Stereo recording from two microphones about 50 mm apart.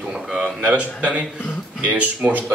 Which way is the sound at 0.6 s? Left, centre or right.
Right.